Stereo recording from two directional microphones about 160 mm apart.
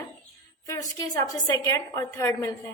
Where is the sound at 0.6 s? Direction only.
20° left (ahead or behind).